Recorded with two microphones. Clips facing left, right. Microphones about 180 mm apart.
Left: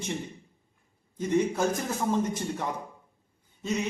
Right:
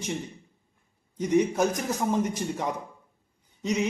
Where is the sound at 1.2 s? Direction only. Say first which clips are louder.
Right 2 dB; 20° right (ahead or behind).